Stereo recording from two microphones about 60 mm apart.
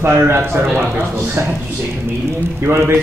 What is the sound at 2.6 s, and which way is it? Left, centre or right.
Speech, right.